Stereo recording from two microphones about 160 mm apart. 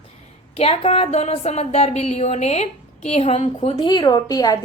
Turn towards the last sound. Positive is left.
turn(degrees=25)  # may be behind; listen again after turning